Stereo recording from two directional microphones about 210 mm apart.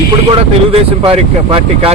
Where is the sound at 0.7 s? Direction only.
25° right (ahead or behind).